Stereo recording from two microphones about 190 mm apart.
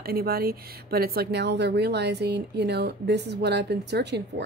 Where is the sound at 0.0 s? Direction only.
55° right (ahead or behind).